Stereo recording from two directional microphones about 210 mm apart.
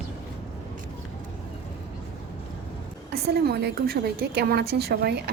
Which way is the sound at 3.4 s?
50° right (ahead or behind).